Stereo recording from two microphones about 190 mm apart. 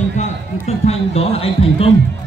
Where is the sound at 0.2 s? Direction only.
35° left (ahead or behind).